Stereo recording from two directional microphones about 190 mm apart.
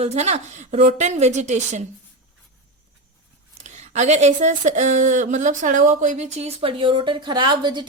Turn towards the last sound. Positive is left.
turn(degrees=-25)  # may be behind; listen again after turning